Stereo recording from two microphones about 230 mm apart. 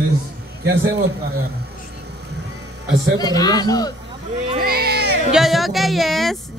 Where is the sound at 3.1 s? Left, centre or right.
Centre.